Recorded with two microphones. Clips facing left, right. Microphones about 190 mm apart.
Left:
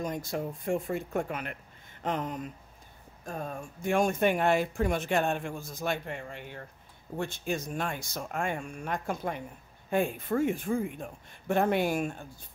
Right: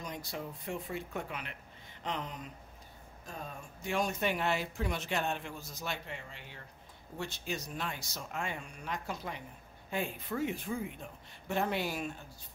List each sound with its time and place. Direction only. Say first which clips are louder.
0.0 s speech: left 8 dB; 50° left (ahead or behind)